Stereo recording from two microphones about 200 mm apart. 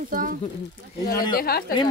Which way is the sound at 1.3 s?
50° left (ahead or behind).